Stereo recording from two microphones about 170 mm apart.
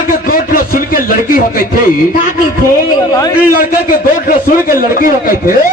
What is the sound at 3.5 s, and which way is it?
A man's voice, 55° left (ahead or behind).